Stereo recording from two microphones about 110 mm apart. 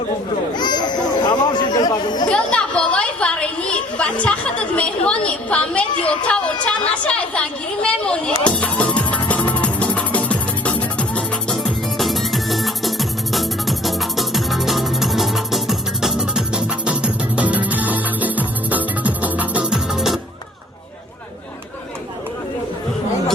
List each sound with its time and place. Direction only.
0.5 s chatter: 40° left (ahead or behind)
2.3 s a woman's voice: 10° left (ahead or behind)
7.1 s music: 10° left (ahead or behind)